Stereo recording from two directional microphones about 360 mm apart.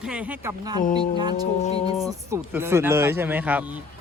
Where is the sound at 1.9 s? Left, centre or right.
Centre.